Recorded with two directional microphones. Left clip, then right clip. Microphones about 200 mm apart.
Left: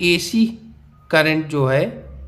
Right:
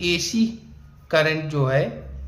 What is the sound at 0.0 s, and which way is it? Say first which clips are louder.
A man's voice: left 5 dB; 35° left (ahead or behind).